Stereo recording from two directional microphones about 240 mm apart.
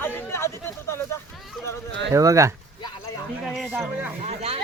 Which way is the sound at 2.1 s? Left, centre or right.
Centre.